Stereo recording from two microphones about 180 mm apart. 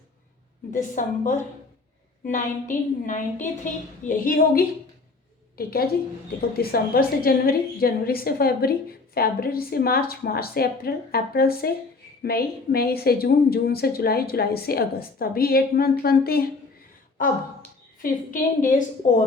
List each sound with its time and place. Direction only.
0.7 s a woman's voice: 45° left (ahead or behind)
18.0 s a woman's voice: 50° left (ahead or behind)